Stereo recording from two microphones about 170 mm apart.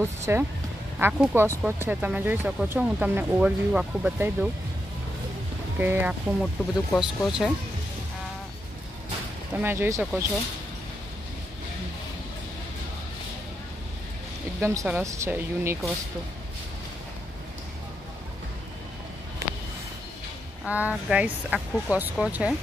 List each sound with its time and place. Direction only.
0.2 s speech: 15° right (ahead or behind)
5.8 s speech: 10° right (ahead or behind)
9.5 s speech: 10° right (ahead or behind)
14.6 s speech: 20° right (ahead or behind)
20.6 s speech: 10° right (ahead or behind)